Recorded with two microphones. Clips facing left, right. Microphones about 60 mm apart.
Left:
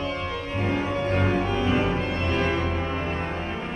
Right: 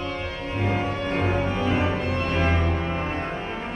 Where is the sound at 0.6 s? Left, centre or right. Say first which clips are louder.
Even; centre.